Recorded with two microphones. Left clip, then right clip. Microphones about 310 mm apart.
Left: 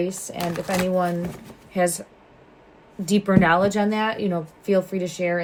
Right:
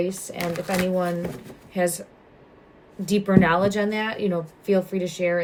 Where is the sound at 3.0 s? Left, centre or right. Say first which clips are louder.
Left 1 dB; centre.